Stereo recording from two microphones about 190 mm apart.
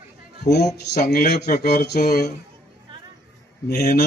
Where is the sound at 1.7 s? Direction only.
55° left (ahead or behind).